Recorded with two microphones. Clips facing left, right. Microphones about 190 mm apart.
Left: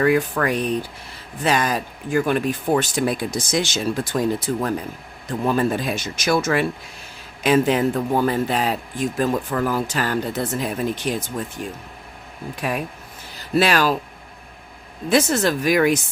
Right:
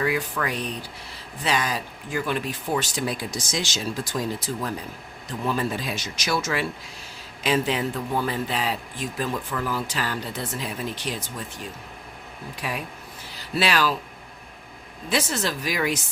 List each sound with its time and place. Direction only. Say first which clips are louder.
0.0 s speech: left 7 dB; 50° left (ahead or behind)
12.6 s speech: left 6 dB; 50° left (ahead or behind)
15.1 s speech: left 8 dB; 50° left (ahead or behind)